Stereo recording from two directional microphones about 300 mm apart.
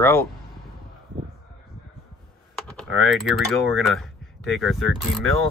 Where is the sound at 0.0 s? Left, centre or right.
Centre.